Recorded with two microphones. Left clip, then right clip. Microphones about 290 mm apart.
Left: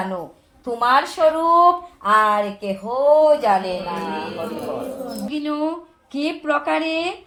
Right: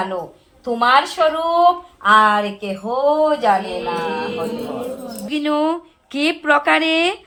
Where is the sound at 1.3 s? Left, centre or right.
Left.